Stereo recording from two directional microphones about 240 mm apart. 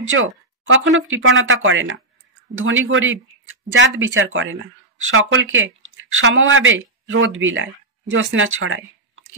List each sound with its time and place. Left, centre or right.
0.1 s speech: right